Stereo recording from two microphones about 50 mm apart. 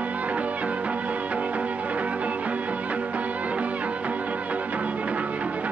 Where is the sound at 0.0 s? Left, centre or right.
Right.